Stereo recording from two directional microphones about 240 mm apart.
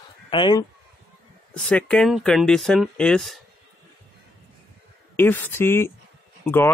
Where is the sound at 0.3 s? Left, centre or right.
Centre.